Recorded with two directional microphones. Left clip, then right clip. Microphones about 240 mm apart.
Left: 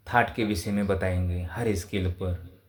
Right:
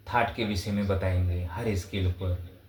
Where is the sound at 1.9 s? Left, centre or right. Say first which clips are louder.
Left 3 dB; left.